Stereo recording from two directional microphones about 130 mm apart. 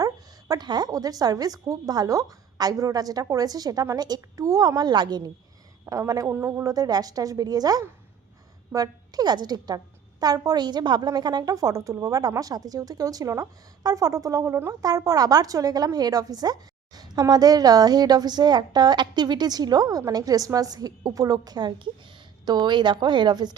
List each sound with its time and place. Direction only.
0.0 s a woman's voice: 30° right (ahead or behind)